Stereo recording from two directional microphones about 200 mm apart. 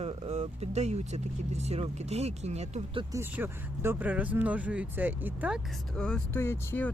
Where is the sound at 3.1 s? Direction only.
10° right (ahead or behind).